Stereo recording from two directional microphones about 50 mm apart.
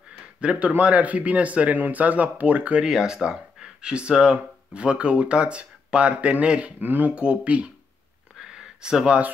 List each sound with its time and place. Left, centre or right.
0.4 s speech: right
2.8 s speech: centre
6.8 s speech: right
8.8 s speech: centre